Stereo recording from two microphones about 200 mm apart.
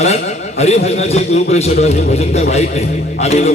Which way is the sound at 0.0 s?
30° left (ahead or behind).